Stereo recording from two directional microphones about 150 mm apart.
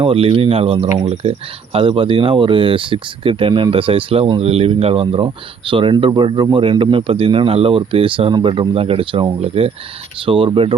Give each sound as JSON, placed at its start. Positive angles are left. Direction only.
{"t": 0.0, "sound": "speech", "side_deg": -40}